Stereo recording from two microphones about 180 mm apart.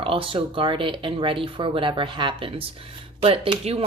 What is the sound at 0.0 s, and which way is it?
Speech, 30° right (ahead or behind).